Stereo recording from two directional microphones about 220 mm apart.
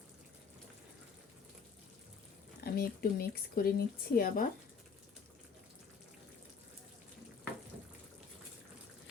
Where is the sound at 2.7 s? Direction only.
40° left (ahead or behind).